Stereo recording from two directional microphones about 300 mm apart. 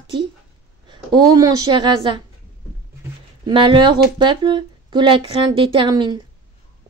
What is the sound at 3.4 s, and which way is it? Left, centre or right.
Speech, centre.